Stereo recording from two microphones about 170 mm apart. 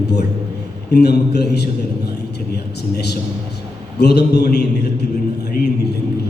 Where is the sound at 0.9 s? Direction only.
75° left (ahead or behind).